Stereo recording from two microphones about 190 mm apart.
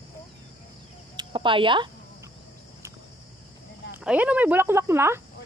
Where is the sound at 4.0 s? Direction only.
5° right (ahead or behind).